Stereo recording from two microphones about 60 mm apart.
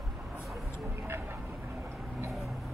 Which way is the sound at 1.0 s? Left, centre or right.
Right.